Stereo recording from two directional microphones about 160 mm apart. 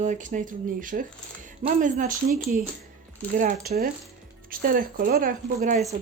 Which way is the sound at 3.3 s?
60° right (ahead or behind).